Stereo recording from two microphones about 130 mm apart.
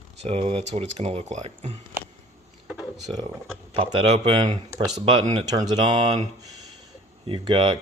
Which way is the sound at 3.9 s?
50° right (ahead or behind).